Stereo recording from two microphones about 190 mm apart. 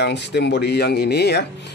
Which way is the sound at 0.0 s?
65° left (ahead or behind).